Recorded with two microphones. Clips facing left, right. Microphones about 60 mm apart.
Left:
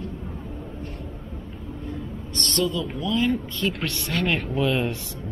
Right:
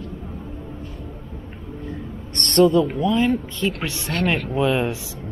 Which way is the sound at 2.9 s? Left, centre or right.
Right.